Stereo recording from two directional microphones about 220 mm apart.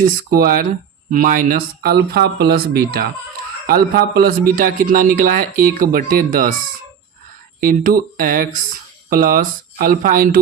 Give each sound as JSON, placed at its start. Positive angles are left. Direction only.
{"t": 0.0, "sound": "a man's voice", "side_deg": -40}
{"t": 7.6, "sound": "a man's voice", "side_deg": -40}